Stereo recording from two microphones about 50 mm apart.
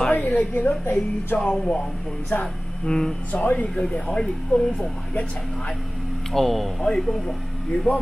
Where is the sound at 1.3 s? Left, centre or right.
Centre.